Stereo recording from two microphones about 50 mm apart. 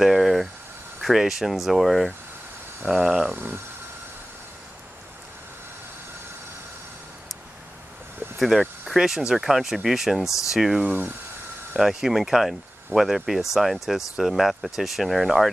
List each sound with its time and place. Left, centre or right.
0.0 s cricket: centre
1.0 s speech: centre
3.3 s speech: right
8.4 s speech: centre